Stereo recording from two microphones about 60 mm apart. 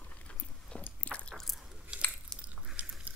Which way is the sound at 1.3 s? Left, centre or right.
Centre.